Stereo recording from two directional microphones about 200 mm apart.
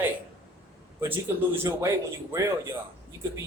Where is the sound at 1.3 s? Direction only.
15° right (ahead or behind).